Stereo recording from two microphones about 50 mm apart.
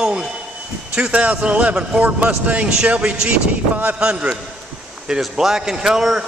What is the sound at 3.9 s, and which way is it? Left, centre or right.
Speech, centre.